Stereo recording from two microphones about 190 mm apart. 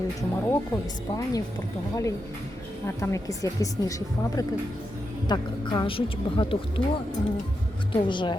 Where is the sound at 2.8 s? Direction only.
15° left (ahead or behind).